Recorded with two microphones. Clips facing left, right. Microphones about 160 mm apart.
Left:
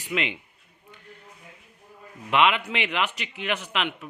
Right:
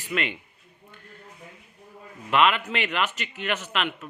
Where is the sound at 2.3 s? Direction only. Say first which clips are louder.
Even; 15° left (ahead or behind).